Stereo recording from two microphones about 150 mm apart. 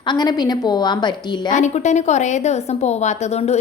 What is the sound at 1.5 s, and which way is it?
A woman's voice, 55° left (ahead or behind).